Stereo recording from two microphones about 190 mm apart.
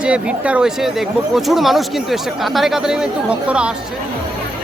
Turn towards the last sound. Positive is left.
turn(degrees=-5)  # may be behind; listen again after turning